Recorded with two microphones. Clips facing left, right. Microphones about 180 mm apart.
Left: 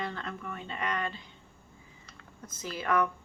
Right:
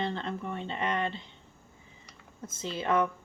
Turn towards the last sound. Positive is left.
turn(degrees=-25)  # may be behind; listen again after turning